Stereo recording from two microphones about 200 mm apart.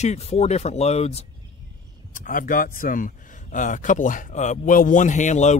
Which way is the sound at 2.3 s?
45° left (ahead or behind).